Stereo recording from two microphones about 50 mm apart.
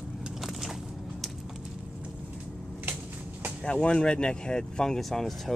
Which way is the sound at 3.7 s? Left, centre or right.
Centre.